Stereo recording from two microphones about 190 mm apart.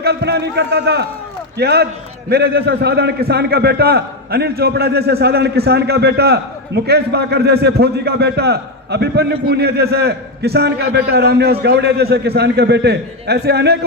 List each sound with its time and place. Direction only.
0.0 s a man's voice: 60° right (ahead or behind)